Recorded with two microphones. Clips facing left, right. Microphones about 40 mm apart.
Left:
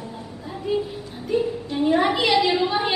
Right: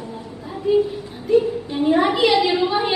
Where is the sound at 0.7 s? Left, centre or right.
Centre.